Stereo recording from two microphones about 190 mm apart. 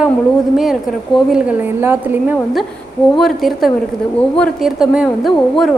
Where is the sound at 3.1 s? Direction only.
Centre (ahead or behind).